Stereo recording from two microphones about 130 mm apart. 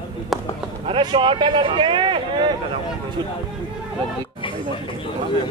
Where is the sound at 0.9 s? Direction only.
35° right (ahead or behind).